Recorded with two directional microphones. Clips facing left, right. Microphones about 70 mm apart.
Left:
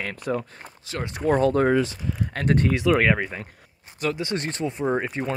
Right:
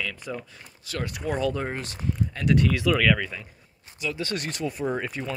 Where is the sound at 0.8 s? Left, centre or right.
Left.